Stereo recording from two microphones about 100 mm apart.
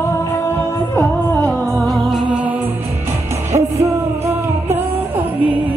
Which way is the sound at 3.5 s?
90° right.